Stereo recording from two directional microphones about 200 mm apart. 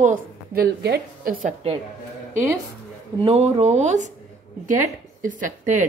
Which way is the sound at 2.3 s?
10° right (ahead or behind).